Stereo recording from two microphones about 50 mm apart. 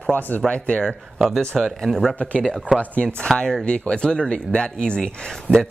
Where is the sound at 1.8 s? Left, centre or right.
Centre.